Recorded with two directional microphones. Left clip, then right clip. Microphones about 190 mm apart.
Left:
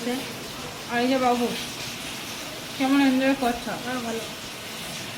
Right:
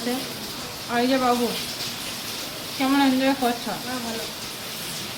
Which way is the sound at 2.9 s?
25° right (ahead or behind).